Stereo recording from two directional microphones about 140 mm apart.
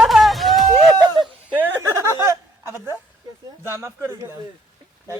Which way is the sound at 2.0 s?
20° right (ahead or behind).